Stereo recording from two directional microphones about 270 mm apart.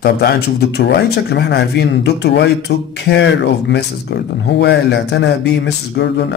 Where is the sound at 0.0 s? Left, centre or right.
Left.